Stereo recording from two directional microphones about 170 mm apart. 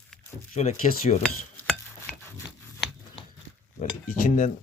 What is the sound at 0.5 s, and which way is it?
Speech, 40° left (ahead or behind).